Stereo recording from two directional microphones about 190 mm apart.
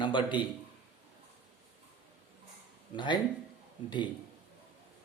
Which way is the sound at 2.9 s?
25° left (ahead or behind).